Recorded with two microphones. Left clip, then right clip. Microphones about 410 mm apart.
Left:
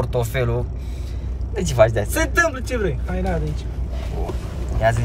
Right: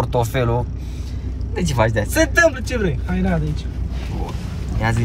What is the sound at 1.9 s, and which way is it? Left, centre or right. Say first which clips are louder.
Speech: right 3 dB; centre.